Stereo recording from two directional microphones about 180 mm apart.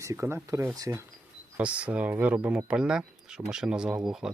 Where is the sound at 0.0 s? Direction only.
15° right (ahead or behind).